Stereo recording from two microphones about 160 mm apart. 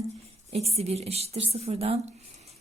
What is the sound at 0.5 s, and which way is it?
A woman's voice, 40° right (ahead or behind).